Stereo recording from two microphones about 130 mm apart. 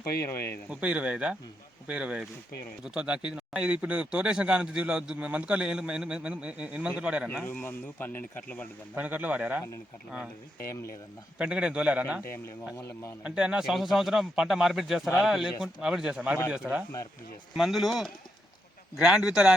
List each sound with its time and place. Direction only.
0.2 s a man's voice: 20° left (ahead or behind)
0.7 s a man's voice: 10° right (ahead or behind)
7.4 s speech: 15° left (ahead or behind)
9.0 s a man's voice: 10° right (ahead or behind)
11.3 s a man's voice: 10° right (ahead or behind)
12.7 s a man's voice: 20° left (ahead or behind)
13.2 s a man's voice: 5° right (ahead or behind)